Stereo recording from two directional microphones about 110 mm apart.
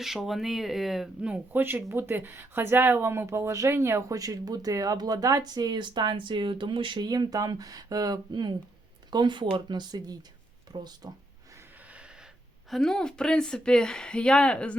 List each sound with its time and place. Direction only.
0.0 s speech: centre (ahead or behind); by 11.1 s 35° right (ahead or behind)
12.7 s speech: 5° left (ahead or behind)